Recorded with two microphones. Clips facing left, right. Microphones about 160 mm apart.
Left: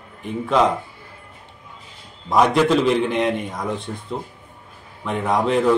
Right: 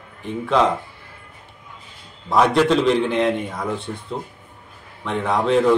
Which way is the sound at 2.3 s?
5° left (ahead or behind).